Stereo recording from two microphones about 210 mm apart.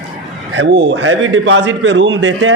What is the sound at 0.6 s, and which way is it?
A man's voice, 55° right (ahead or behind).